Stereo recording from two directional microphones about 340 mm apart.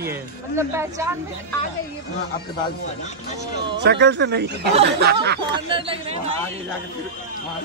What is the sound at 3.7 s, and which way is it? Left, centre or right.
Speech, right.